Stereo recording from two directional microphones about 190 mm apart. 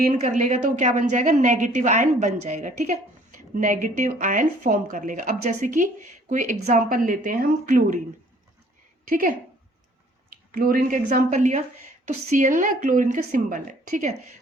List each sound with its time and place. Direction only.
0.1 s a woman's voice: 40° right (ahead or behind)
9.0 s a woman's voice: 45° right (ahead or behind)
10.5 s speech: 50° right (ahead or behind)